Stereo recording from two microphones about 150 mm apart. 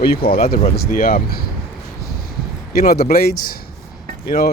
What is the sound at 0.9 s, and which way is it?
Speech, 70° left (ahead or behind).